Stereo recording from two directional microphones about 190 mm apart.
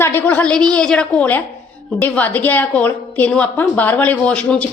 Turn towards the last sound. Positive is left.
turn(degrees=5)  # may be behind; listen again after turning